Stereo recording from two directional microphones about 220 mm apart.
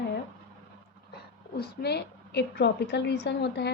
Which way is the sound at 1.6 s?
50° left (ahead or behind).